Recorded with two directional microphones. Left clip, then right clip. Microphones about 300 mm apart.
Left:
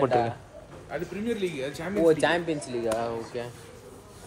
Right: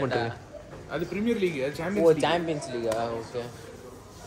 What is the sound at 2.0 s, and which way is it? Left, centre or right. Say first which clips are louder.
Speech: even; left.